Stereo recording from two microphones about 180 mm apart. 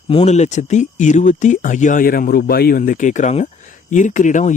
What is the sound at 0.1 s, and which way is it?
Speech, 35° left (ahead or behind).